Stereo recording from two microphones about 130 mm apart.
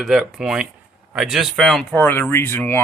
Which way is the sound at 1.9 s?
15° left (ahead or behind).